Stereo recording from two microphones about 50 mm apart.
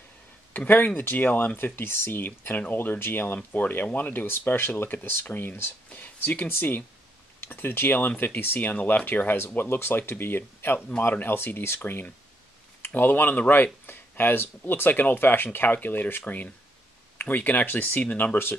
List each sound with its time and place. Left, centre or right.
0.7 s speech: left
1.6 s speech: left
3.5 s speech: left
5.9 s a sound: left
6.4 s speech: left
9.6 s speech: left